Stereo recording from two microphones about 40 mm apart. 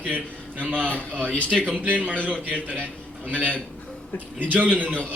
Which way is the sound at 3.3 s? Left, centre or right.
Right.